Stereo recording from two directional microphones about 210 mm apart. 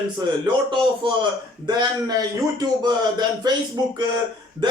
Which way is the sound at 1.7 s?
20° right (ahead or behind).